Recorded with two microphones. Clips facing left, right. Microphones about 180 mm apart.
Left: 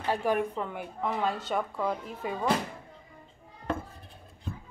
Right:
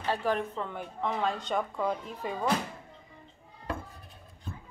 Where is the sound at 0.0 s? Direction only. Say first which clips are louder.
Left 2 dB; 15° left (ahead or behind).